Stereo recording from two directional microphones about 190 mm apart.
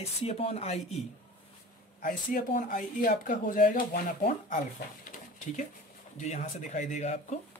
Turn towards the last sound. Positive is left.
turn(degrees=40)  # may be behind; listen again after turning